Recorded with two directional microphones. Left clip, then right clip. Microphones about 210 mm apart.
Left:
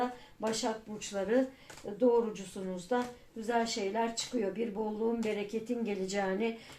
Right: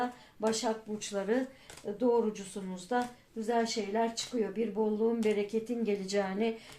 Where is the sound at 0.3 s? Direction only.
30° right (ahead or behind).